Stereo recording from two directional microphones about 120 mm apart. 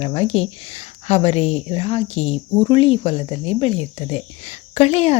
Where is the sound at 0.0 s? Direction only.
60° left (ahead or behind).